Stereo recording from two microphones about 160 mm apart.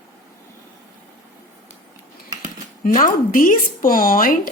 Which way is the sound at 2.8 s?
60° left (ahead or behind).